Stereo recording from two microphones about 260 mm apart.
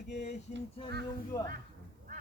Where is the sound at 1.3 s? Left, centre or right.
Centre.